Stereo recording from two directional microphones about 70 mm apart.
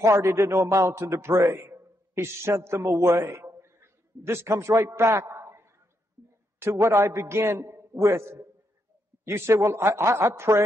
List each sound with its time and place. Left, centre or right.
0.0 s a man's voice: right